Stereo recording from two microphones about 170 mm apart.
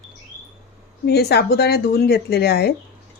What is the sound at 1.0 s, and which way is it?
A woman's voice, 75° left (ahead or behind).